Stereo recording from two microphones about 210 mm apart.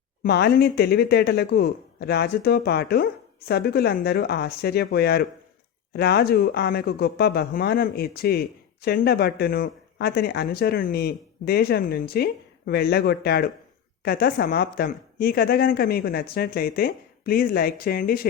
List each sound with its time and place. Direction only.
0.2 s speech: 50° left (ahead or behind)